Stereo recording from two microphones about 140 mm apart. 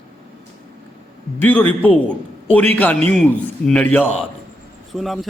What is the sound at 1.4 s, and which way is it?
A man's voice, 10° left (ahead or behind).